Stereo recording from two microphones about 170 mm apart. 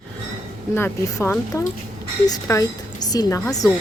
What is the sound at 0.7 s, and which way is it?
A woman's voice, 15° left (ahead or behind).